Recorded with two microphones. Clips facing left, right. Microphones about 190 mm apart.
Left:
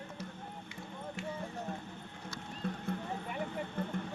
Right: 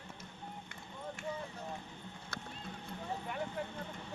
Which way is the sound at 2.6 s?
55° left (ahead or behind).